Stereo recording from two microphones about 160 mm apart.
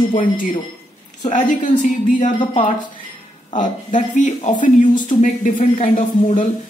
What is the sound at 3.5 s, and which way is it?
Speech, 50° left (ahead or behind).